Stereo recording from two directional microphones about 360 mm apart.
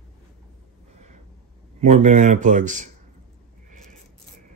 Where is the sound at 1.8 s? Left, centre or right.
Centre.